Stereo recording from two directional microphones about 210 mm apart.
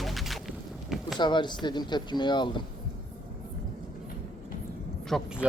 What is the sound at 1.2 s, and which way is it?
Speech, 20° left (ahead or behind).